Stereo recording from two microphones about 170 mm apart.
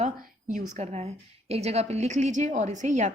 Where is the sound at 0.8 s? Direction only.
40° right (ahead or behind).